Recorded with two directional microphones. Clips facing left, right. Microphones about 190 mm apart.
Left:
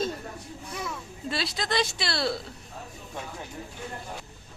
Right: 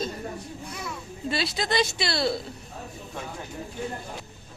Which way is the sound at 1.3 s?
Centre (ahead or behind).